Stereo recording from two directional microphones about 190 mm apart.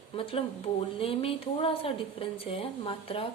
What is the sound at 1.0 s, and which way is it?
A woman's voice, 30° left (ahead or behind).